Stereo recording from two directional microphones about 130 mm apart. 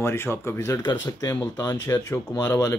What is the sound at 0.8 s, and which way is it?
Speech, 30° left (ahead or behind).